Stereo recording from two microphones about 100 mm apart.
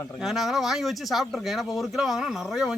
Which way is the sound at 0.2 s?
5° right (ahead or behind).